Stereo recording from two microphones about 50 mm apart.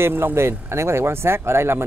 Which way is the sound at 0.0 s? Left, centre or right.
Right.